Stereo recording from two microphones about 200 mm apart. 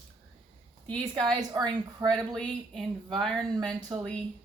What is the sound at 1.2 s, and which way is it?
Speech, 20° right (ahead or behind).